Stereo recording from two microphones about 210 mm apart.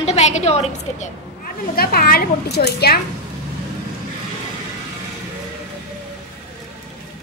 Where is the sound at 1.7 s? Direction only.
45° left (ahead or behind).